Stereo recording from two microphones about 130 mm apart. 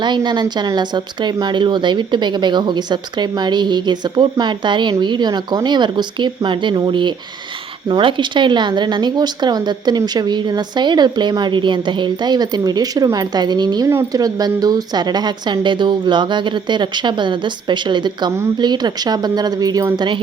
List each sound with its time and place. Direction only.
0.0 s speech: 35° right (ahead or behind)